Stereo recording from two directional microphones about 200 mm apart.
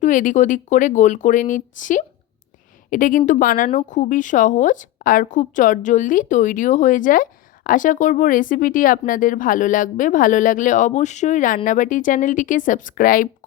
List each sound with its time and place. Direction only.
0.0 s a woman's voice: 40° left (ahead or behind)